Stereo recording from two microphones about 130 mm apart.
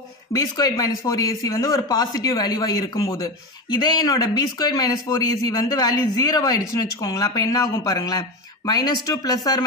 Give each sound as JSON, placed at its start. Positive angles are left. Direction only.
{"t": 0.3, "sound": "speech", "side_deg": 30}